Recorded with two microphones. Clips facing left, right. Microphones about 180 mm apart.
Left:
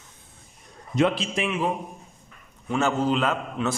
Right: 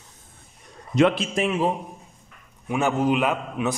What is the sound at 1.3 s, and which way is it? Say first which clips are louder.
Speech: right 3 dB; 35° right (ahead or behind).